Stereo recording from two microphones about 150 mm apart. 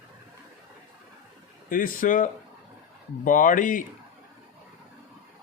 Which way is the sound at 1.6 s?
70° left (ahead or behind).